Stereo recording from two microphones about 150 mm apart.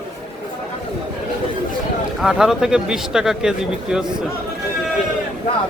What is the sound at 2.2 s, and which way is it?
Speech, 5° right (ahead or behind).